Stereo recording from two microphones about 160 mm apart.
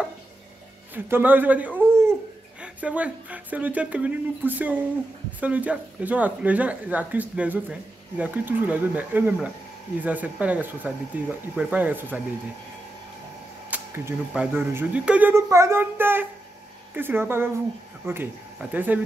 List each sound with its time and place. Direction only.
0.9 s speech: 15° right (ahead or behind)
13.7 s speech: 15° right (ahead or behind)